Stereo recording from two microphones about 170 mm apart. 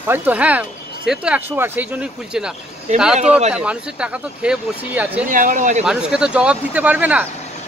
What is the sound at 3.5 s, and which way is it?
Speech, 5° right (ahead or behind).